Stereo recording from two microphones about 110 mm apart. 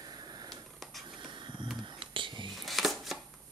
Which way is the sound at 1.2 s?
45° right (ahead or behind).